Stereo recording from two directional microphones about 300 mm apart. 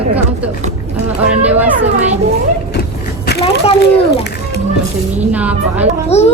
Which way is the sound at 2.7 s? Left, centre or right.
Left.